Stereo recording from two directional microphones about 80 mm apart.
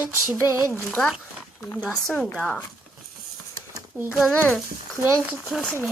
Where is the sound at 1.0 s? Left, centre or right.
Centre.